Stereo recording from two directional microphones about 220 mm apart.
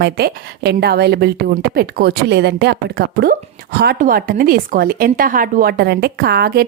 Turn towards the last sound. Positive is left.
turn(degrees=-45)  # may be behind; listen again after turning